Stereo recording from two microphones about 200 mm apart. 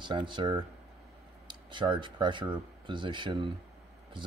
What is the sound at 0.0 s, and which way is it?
Speech, 20° right (ahead or behind).